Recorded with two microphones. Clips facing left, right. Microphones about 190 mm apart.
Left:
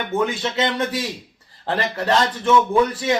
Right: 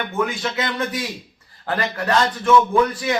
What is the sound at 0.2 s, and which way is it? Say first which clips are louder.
A man's voice: left 1 dB; 30° left (ahead or behind).